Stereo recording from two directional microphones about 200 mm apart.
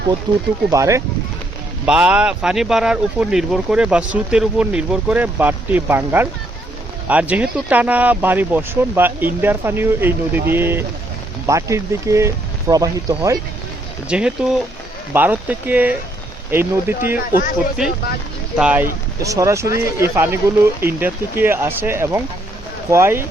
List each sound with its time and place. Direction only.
0.3 s speech: 20° right (ahead or behind)
14.1 s speech: 5° right (ahead or behind)
18.5 s speech: 5° right (ahead or behind)